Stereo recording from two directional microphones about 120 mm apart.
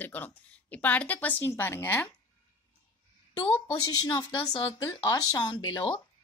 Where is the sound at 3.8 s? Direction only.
35° left (ahead or behind).